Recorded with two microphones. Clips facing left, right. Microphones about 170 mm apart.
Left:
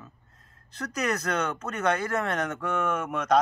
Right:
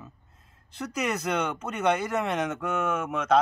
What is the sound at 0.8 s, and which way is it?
Speech, 5° right (ahead or behind).